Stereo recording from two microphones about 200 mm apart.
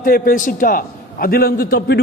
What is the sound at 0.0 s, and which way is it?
A man's voice, 45° left (ahead or behind).